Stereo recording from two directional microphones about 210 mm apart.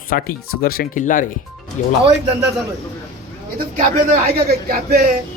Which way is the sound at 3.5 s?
35° right (ahead or behind).